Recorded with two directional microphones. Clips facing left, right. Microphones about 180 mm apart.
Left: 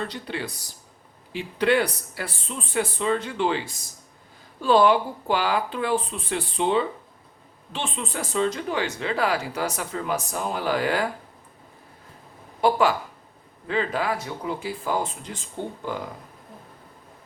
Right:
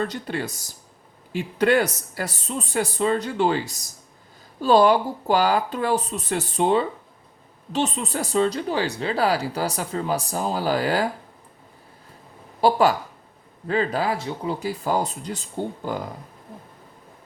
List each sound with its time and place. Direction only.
0.1 s speech: 45° right (ahead or behind)
12.6 s speech: 40° right (ahead or behind)